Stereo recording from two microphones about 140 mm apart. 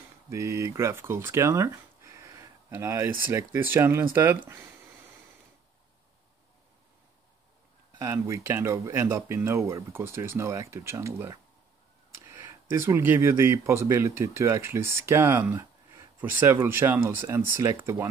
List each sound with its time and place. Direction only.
0.3 s speech: 20° right (ahead or behind)
8.0 s speech: 20° right (ahead or behind)